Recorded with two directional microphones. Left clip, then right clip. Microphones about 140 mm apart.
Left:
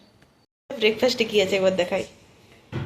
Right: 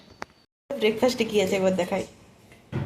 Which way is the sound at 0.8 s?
5° right (ahead or behind).